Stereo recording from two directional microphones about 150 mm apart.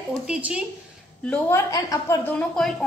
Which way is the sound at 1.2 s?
10° left (ahead or behind).